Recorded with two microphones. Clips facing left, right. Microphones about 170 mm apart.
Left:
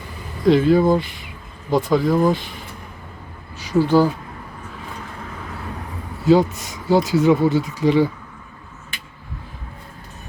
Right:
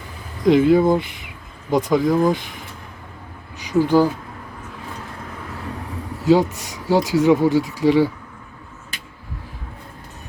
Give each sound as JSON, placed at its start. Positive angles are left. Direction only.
{"t": 0.4, "sound": "speech", "side_deg": -20}
{"t": 3.6, "sound": "speech", "side_deg": -15}
{"t": 6.2, "sound": "speech", "side_deg": -15}